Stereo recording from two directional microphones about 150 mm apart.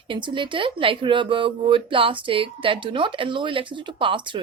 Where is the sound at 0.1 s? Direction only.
35° right (ahead or behind).